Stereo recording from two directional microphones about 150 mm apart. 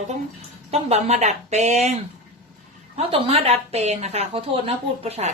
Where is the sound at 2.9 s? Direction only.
40° right (ahead or behind).